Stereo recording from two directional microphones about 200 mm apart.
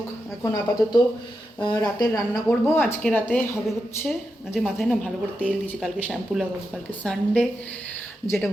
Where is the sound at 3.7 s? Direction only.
Centre (ahead or behind).